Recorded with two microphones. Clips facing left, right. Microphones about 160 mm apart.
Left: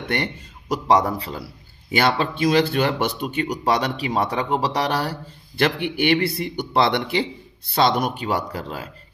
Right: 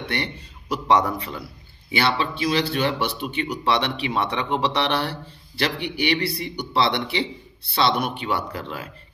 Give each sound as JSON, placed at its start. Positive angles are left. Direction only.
{"t": 0.1, "sound": "speech", "side_deg": 45}
{"t": 1.9, "sound": "speech", "side_deg": 45}